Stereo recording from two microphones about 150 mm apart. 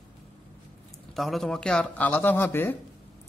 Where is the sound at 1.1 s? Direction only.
Centre (ahead or behind).